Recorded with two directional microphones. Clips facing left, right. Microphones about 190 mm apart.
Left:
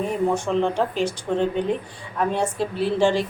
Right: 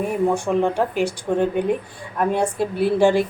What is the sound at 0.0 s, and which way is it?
Speech, 10° right (ahead or behind).